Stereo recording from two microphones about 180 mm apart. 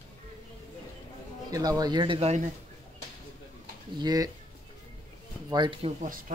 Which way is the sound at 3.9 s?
20° right (ahead or behind).